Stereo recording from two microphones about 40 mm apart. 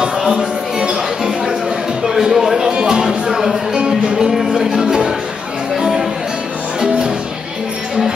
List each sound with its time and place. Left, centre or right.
0.0 s music: centre
2.0 s a sound: centre
2.6 s music: right
3.3 s music: centre